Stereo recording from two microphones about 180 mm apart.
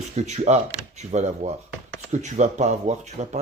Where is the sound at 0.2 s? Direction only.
40° right (ahead or behind).